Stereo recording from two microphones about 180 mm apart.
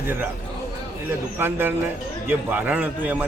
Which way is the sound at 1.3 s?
10° right (ahead or behind).